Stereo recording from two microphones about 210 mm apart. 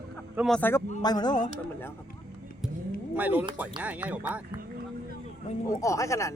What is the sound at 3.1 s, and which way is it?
A man's voice, 10° right (ahead or behind).